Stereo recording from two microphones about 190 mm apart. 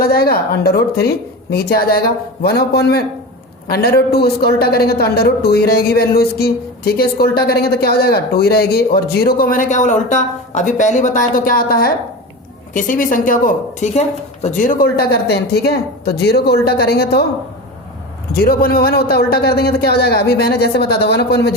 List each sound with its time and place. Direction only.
0.0 s a man's voice: 55° left (ahead or behind)
18.3 s a man's voice: 50° left (ahead or behind)